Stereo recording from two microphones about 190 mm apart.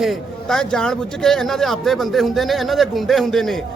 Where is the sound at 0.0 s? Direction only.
Centre (ahead or behind).